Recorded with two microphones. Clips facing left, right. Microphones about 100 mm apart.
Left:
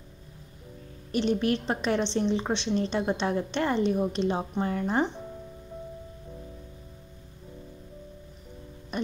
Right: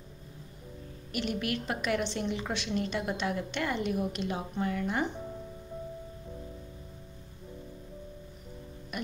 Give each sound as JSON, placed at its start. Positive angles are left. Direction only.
{"t": 1.1, "sound": "a woman's voice", "side_deg": 30}
{"t": 8.9, "sound": "music", "side_deg": 30}